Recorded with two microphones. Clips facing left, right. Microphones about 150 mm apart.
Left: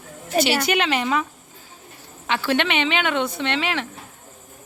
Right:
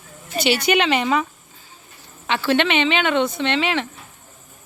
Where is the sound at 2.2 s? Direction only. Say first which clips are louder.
Right 3 dB; 10° left (ahead or behind).